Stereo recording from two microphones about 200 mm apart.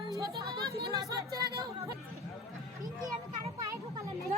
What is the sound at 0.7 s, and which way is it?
Speech, 15° right (ahead or behind).